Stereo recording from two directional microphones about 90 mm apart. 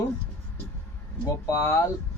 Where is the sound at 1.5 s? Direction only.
35° left (ahead or behind).